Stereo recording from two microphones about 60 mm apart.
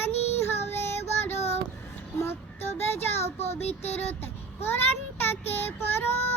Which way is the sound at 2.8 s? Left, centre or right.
Left.